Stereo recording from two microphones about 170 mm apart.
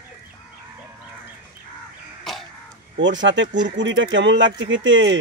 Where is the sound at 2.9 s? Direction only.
90° right.